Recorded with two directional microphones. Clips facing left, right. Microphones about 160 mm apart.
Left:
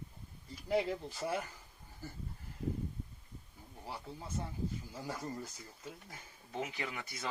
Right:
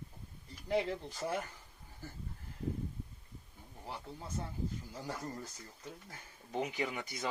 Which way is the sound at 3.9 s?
10° left (ahead or behind).